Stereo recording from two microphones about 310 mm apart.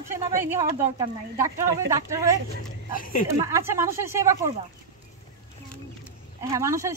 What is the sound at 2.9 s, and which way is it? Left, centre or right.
Speech, left.